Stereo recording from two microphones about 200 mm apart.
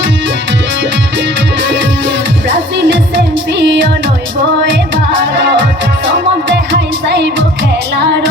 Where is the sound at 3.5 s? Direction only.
60° right (ahead or behind).